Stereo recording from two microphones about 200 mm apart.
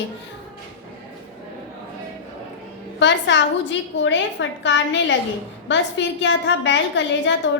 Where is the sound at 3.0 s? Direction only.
65° left (ahead or behind).